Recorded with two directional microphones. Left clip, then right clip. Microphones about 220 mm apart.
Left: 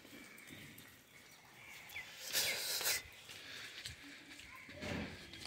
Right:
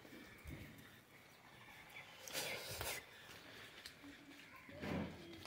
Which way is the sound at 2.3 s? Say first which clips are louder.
Left 7 dB; centre (ahead or behind).